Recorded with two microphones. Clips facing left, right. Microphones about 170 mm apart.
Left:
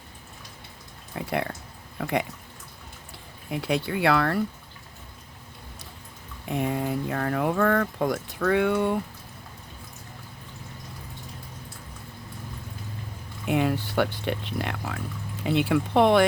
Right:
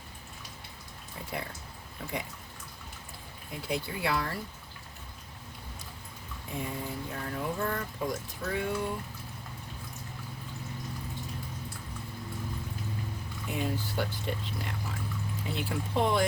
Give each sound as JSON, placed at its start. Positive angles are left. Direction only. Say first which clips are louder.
{"t": 1.1, "sound": "speech", "louder": "left 10 dB", "side_deg": 70}
{"t": 3.5, "sound": "speech", "louder": "left 8 dB", "side_deg": 70}
{"t": 6.5, "sound": "speech", "louder": "left 10 dB", "side_deg": 70}
{"t": 13.5, "sound": "speech", "louder": "left 9 dB", "side_deg": 70}